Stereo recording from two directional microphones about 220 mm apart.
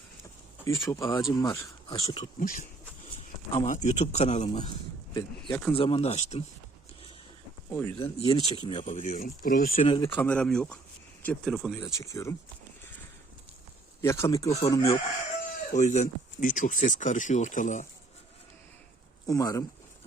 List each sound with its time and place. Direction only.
0.6 s speech: 15° left (ahead or behind)
2.4 s speech: 40° left (ahead or behind)
5.5 s speech: 5° left (ahead or behind)
5.7 s speech: 25° left (ahead or behind)
7.7 s speech: 15° left (ahead or behind)
7.9 s speech: 25° left (ahead or behind); by 9.7 s 40° left (ahead or behind)
9.7 s speech: 25° left (ahead or behind)
10.2 s speech: 5° left (ahead or behind)
11.8 s speech: 15° left (ahead or behind)
14.0 s speech: 15° left (ahead or behind)
15.7 s speech: 35° left (ahead or behind)
19.3 s speech: 15° left (ahead or behind)